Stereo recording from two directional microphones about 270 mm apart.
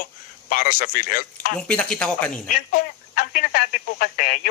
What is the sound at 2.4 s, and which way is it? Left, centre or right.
Speech, left.